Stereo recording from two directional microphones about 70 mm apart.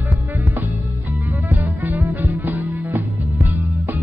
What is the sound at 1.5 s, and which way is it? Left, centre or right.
Music, right.